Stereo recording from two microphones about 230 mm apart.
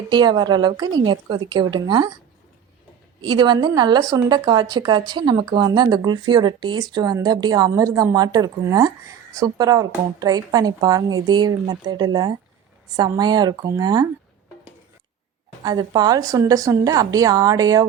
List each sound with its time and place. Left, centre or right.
0.1 s a woman's voice: centre
3.2 s a woman's voice: centre
15.6 s a woman's voice: centre